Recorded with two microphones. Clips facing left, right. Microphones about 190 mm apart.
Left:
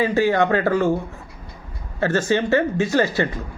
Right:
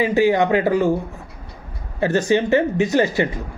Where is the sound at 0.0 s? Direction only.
15° right (ahead or behind).